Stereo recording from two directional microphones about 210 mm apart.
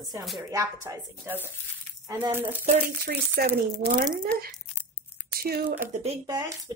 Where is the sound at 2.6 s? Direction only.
45° right (ahead or behind).